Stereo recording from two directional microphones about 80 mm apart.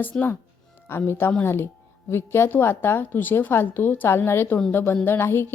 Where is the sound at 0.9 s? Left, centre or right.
Left.